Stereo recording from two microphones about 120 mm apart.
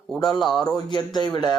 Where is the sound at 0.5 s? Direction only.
35° left (ahead or behind).